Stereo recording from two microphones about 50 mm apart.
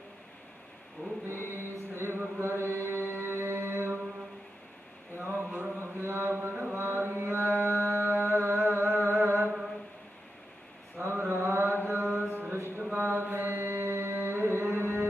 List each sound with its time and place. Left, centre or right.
1.0 s a sound: left
1.3 s chant: right
3.1 s music: right
5.3 s a sound: right
5.8 s mantra: right
11.0 s mantra: right